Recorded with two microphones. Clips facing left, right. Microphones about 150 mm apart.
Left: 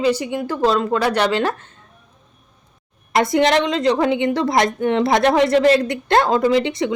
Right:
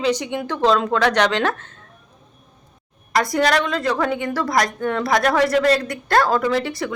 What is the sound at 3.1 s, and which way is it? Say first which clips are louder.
A woman's voice: left 3 dB; 25° left (ahead or behind).